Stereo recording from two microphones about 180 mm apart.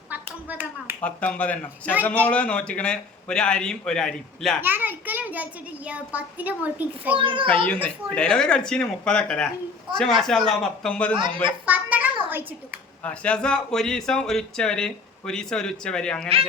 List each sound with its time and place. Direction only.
0.1 s a sound: 10° right (ahead or behind)
1.0 s a man's voice: 5° left (ahead or behind)
4.6 s a child's voice: 10° right (ahead or behind)
7.2 s a child's voice: 30° right (ahead or behind)
7.5 s speech: 10° left (ahead or behind)
11.6 s a child's voice: 10° right (ahead or behind)
13.0 s speech: 5° left (ahead or behind)